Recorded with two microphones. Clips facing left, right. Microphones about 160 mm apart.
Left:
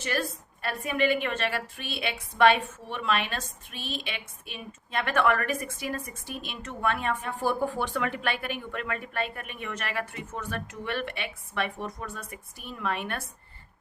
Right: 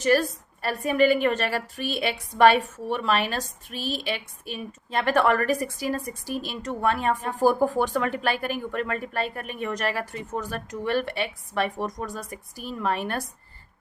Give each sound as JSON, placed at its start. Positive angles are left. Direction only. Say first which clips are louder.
{"t": 0.0, "sound": "a woman's voice", "louder": "right 9 dB", "side_deg": -40}